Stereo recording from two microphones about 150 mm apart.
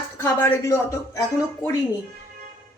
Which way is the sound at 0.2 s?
15° left (ahead or behind).